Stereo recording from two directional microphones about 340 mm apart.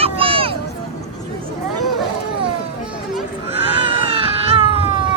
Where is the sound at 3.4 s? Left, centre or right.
Centre.